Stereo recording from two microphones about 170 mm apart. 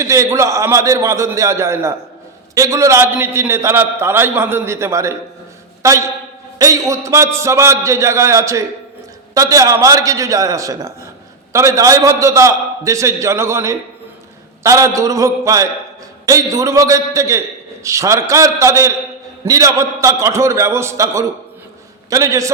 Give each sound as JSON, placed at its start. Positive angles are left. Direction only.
{"t": 0.0, "sound": "a man's voice", "side_deg": -20}